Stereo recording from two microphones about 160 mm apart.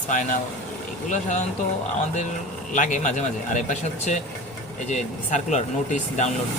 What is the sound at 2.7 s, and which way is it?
Speech, 50° left (ahead or behind).